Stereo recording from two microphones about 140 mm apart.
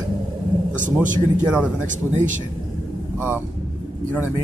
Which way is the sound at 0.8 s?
65° right (ahead or behind).